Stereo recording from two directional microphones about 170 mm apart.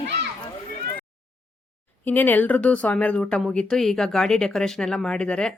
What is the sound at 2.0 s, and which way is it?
Speech, 10° left (ahead or behind).